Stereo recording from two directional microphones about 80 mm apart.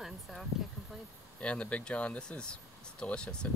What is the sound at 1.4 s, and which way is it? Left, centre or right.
Speech, centre.